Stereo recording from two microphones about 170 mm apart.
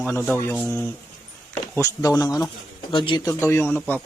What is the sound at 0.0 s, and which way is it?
Speech, 10° left (ahead or behind).